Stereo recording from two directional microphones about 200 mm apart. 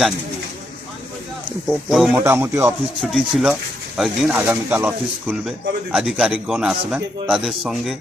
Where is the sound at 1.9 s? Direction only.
5° right (ahead or behind).